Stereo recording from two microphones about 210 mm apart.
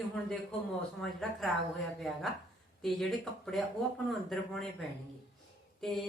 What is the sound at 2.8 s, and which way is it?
A woman's voice, centre (ahead or behind).